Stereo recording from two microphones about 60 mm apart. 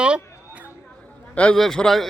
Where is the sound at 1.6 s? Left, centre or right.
Centre.